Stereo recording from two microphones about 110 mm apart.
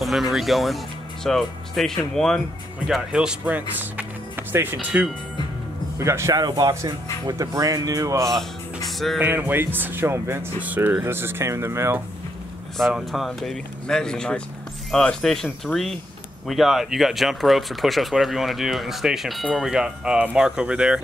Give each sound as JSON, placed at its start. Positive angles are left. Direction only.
{"t": 0.0, "sound": "speech", "side_deg": 0}
{"t": 2.9, "sound": "speech", "side_deg": -5}
{"t": 5.9, "sound": "speech", "side_deg": -25}
{"t": 8.3, "sound": "speech", "side_deg": 0}
{"t": 9.2, "sound": "speech", "side_deg": -20}
{"t": 12.7, "sound": "speech", "side_deg": 0}